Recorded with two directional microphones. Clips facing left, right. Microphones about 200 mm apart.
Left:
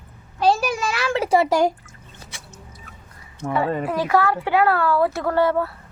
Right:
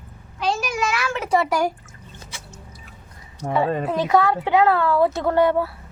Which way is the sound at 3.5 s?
25° right (ahead or behind).